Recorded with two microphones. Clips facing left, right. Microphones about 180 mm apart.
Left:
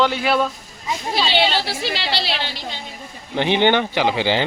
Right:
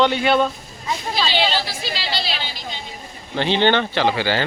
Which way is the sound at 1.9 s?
65° left (ahead or behind).